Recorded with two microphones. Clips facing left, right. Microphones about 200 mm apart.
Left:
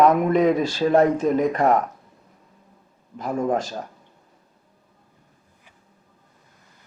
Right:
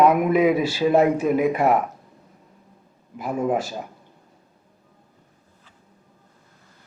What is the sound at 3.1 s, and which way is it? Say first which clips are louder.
Speech: even; 5° right (ahead or behind).